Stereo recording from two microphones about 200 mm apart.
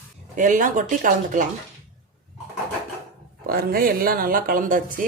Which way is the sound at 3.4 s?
50° right (ahead or behind).